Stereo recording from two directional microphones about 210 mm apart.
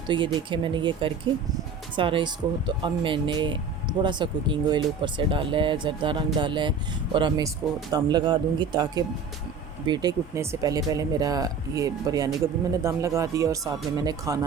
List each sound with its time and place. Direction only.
0.3 s speech: 25° right (ahead or behind)